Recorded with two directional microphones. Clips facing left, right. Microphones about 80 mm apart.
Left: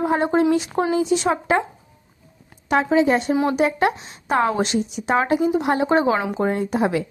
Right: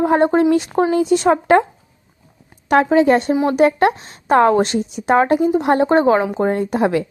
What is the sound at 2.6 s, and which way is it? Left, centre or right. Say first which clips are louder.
Speech: right 5 dB; right.